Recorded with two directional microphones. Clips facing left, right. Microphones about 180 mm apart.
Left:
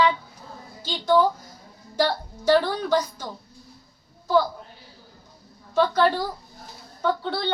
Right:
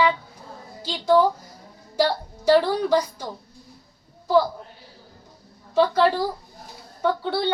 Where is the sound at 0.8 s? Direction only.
30° right (ahead or behind).